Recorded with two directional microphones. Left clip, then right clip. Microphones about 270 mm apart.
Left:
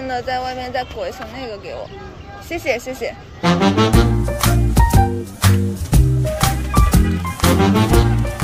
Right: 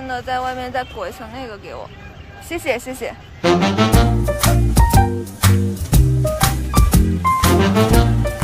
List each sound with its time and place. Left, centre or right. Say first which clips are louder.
0.0 s speech: even; centre
3.4 s music: even; centre